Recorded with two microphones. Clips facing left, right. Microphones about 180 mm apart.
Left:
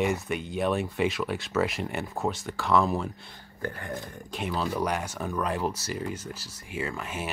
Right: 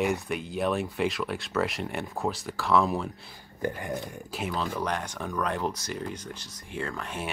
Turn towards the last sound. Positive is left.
turn(degrees=5)  # may be behind; listen again after turning